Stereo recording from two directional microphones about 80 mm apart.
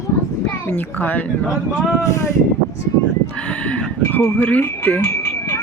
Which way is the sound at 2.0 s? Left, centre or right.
Left.